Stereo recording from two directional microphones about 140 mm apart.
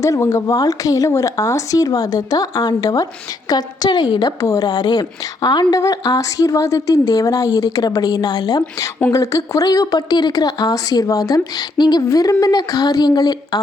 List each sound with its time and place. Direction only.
0.0 s a woman's voice: 20° left (ahead or behind)